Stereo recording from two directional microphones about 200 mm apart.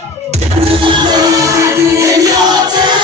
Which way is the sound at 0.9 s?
20° right (ahead or behind).